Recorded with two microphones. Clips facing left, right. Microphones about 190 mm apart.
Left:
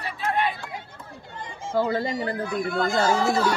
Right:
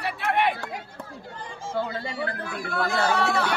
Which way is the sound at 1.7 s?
40° left (ahead or behind).